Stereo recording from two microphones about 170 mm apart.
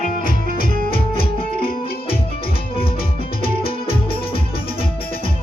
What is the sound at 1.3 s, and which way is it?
Music, 30° left (ahead or behind).